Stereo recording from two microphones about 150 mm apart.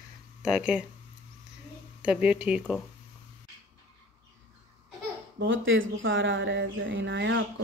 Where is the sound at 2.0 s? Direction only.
10° right (ahead or behind).